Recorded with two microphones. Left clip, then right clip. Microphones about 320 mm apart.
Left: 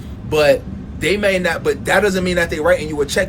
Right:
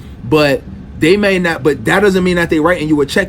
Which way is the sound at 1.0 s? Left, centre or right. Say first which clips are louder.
Right 5 dB; right.